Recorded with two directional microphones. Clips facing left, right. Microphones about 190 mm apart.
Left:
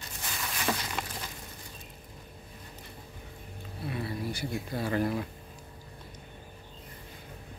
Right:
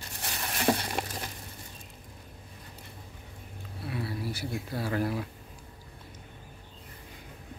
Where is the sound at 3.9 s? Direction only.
5° right (ahead or behind).